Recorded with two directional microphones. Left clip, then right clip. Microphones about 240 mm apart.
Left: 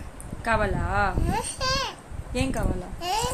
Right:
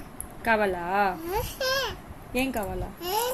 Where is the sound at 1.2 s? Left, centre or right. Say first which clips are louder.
Left 1 dB; centre.